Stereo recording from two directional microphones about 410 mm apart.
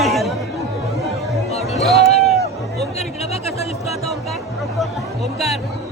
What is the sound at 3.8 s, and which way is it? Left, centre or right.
Speech, centre.